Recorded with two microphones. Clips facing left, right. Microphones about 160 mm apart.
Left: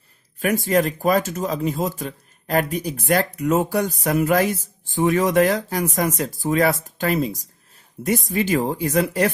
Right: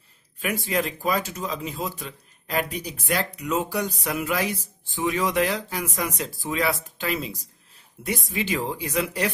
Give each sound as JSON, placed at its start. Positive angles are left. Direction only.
{"t": 0.3, "sound": "speech", "side_deg": 45}